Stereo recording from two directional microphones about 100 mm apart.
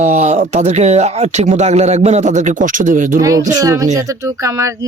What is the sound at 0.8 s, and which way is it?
Speech, 90° right.